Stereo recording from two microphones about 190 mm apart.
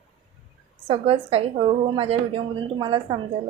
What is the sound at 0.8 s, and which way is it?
A woman's voice, 30° right (ahead or behind).